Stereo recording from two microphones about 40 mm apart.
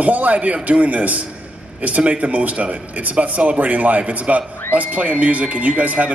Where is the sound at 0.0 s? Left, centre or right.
Right.